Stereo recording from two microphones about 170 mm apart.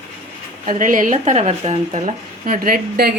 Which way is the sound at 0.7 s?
50° right (ahead or behind).